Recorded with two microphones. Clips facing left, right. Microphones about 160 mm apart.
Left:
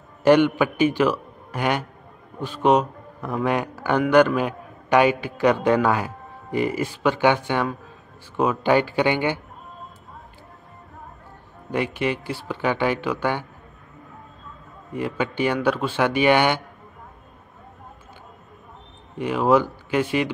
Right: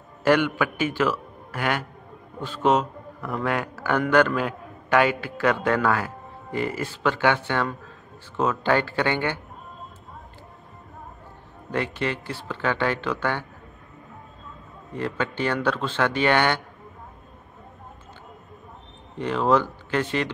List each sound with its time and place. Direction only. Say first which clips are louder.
0.2 s a man's voice: left 4 dB; 20° left (ahead or behind)
11.7 s a man's voice: left 3 dB; 15° left (ahead or behind)
14.9 s a man's voice: left 2 dB; 10° left (ahead or behind)
19.1 s a man's voice: left 2 dB; 10° left (ahead or behind)